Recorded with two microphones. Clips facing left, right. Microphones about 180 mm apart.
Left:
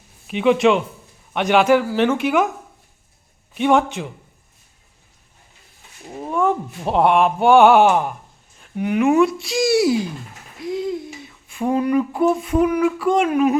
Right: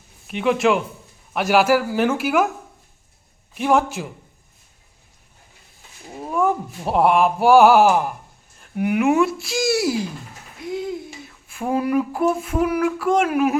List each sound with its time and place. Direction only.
0.3 s speech: centre (ahead or behind)
3.5 s speech: centre (ahead or behind)
6.2 s speech: 5° right (ahead or behind)